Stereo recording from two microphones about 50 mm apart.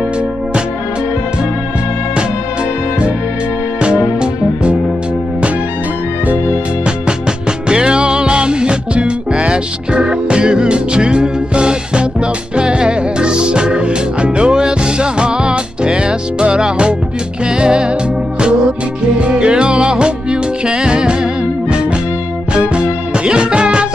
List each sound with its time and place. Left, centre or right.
3.8 s music: right
7.6 s music: centre
19.1 s music: right